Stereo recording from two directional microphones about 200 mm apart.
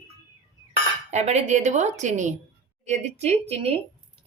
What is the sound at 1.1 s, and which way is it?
A woman's voice, 35° right (ahead or behind).